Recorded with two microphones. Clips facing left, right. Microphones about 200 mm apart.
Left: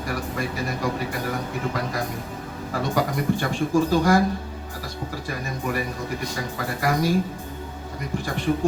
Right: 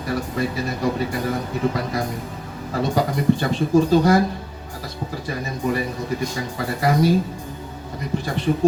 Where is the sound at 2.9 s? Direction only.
25° right (ahead or behind).